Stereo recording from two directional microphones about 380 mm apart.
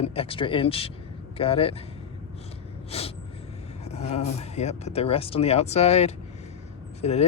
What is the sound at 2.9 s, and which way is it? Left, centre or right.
Gasp, centre.